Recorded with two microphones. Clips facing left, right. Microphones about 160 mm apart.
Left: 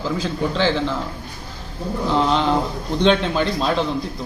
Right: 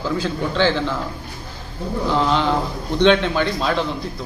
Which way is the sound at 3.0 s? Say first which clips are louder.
Right 2 dB; 10° left (ahead or behind).